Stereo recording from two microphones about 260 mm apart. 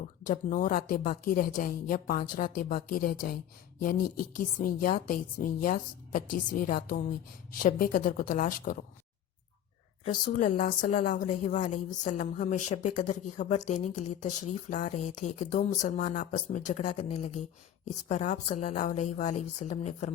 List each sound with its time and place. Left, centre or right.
0.3 s a woman's voice: left
10.2 s speech: left